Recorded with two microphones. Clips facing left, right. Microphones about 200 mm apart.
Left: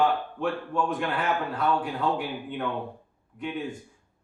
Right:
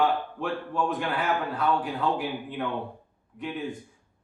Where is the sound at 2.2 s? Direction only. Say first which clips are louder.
Even; centre (ahead or behind).